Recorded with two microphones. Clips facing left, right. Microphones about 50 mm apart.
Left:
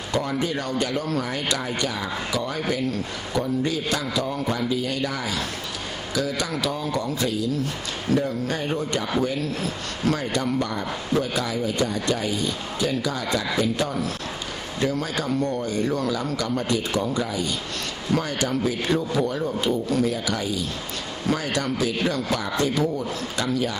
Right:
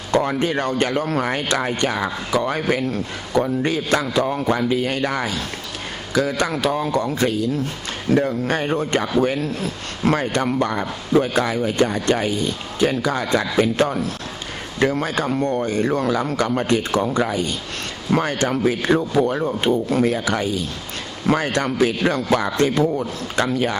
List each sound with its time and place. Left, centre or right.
0.1 s speech: right